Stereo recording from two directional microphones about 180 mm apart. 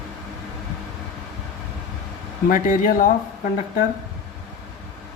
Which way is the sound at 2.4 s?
50° left (ahead or behind).